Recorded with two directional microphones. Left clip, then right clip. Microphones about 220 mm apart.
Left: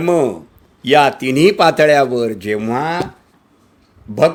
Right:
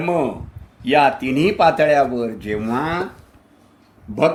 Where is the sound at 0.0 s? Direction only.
45° left (ahead or behind).